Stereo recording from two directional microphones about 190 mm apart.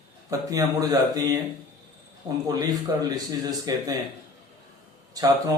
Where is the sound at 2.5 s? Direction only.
20° right (ahead or behind).